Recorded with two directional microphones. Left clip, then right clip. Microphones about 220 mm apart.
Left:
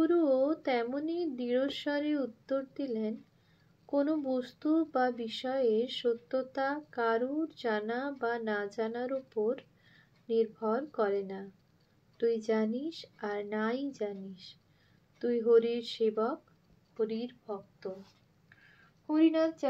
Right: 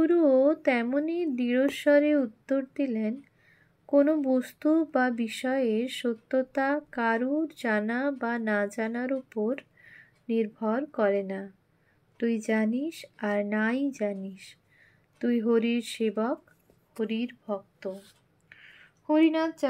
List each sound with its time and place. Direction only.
0.0 s a woman's voice: 40° right (ahead or behind)
19.0 s speech: 45° right (ahead or behind)